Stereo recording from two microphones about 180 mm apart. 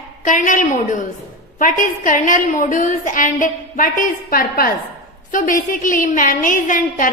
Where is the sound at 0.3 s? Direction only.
45° left (ahead or behind).